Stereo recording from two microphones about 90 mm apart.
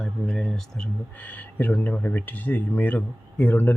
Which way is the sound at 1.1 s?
20° left (ahead or behind).